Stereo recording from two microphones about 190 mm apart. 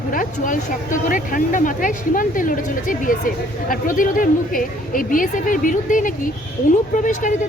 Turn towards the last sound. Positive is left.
turn(degrees=40)  # may be behind; listen again after turning